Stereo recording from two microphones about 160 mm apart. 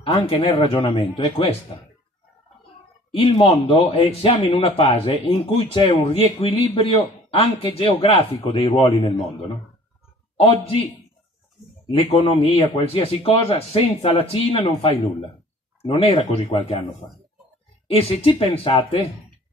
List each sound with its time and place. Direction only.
0.3 s a man's voice: 35° left (ahead or behind)
3.3 s a man's voice: 35° left (ahead or behind)
10.4 s a man's voice: 40° left (ahead or behind)
11.9 s a man's voice: 35° left (ahead or behind)
15.8 s a man's voice: 40° left (ahead or behind)
17.8 s a man's voice: 40° left (ahead or behind)